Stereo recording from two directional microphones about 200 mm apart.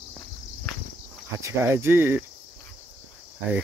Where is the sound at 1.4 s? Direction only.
10° right (ahead or behind).